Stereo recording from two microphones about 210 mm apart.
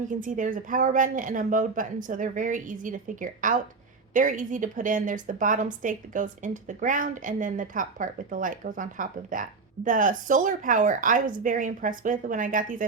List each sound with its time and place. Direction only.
0.1 s a woman's voice: 40° right (ahead or behind)